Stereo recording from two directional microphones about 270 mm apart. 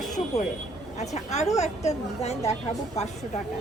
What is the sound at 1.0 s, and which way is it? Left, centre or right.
A woman's voice, left.